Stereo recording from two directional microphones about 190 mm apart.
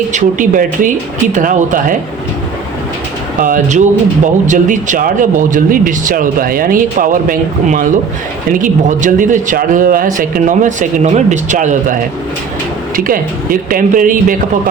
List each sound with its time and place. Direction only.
0.1 s speech: 45° right (ahead or behind)
3.4 s speech: 40° right (ahead or behind)
13.1 s speech: 50° right (ahead or behind)